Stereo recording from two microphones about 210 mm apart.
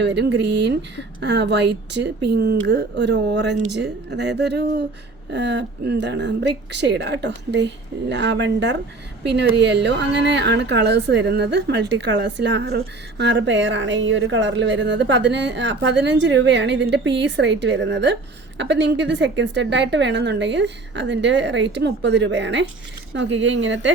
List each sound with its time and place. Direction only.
0.0 s speech: 55° right (ahead or behind)